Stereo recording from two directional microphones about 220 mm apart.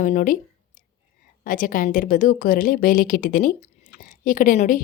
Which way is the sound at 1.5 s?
40° left (ahead or behind).